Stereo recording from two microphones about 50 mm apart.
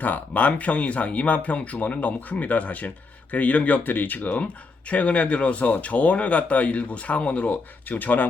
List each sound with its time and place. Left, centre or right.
0.0 s speech: left